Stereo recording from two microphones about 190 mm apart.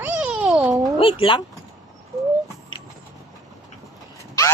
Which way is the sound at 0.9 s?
25° left (ahead or behind).